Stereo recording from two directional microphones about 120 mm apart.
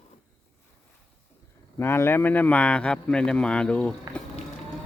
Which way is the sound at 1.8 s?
20° left (ahead or behind).